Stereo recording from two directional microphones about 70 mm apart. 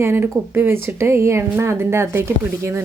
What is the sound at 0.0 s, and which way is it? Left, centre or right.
Speech, right.